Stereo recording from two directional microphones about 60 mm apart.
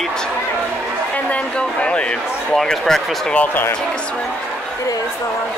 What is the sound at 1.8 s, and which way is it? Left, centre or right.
Speech, centre.